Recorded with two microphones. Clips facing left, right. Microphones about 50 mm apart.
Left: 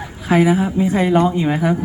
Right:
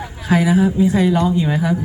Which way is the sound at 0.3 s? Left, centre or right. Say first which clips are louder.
Even; left.